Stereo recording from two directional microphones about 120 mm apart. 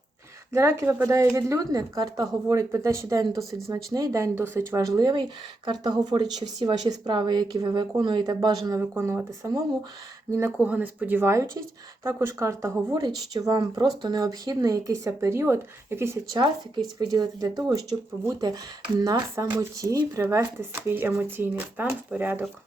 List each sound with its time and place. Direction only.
0.5 s a woman's voice: 25° right (ahead or behind)
8.8 s a woman's voice: 15° right (ahead or behind)
10.6 s a woman's voice: 10° right (ahead or behind)
16.3 s speech: 35° right (ahead or behind)
20.2 s a woman's voice: 20° right (ahead or behind)